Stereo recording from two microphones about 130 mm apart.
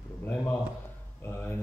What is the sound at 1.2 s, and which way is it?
Speech, 20° left (ahead or behind).